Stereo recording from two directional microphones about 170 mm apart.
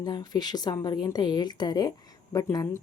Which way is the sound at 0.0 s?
25° left (ahead or behind).